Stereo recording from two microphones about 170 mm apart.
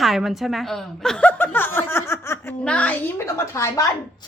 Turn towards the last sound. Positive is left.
turn(degrees=20)  # may be behind; listen again after turning